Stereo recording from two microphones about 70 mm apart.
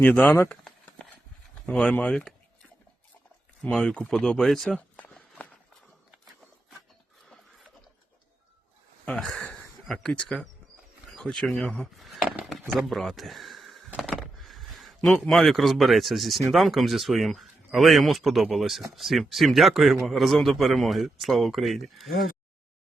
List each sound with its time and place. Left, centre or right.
0.0 s speech: left
0.4 s a sound: centre
1.6 s speech: centre
3.6 s speech: centre
4.9 s walk: centre
9.0 s speech: centre
10.1 s speech: centre
11.1 s speech: centre
12.5 s a sound: centre
14.3 s speech: centre